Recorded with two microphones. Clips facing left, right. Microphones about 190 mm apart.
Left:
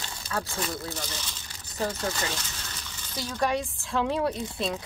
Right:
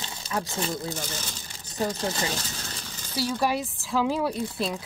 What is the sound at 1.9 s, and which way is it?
Speech, 25° right (ahead or behind).